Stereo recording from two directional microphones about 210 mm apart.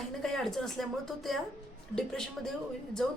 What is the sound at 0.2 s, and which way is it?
A woman's voice, centre (ahead or behind).